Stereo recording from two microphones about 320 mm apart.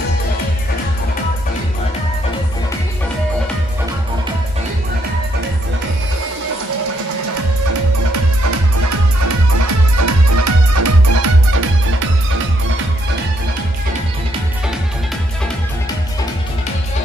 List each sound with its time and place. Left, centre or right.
8.1 s music: right